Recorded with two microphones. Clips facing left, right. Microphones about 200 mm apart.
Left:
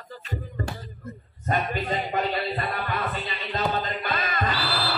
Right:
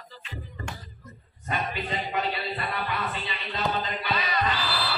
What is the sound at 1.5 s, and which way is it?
Music, 45° left (ahead or behind).